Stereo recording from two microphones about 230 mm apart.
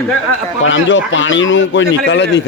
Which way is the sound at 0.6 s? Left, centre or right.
Left.